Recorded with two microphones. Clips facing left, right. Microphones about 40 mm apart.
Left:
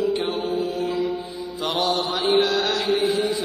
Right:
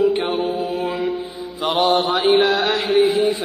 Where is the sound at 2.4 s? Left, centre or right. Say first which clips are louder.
Right 4 dB; right.